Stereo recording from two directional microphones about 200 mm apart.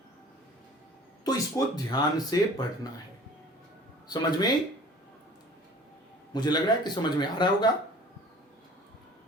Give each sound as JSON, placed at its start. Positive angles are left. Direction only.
{"t": 1.2, "sound": "speech", "side_deg": 20}
{"t": 4.1, "sound": "speech", "side_deg": 20}
{"t": 6.3, "sound": "speech", "side_deg": 20}